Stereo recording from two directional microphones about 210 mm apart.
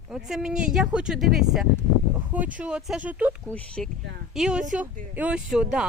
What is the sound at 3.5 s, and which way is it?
Speech, 5° left (ahead or behind).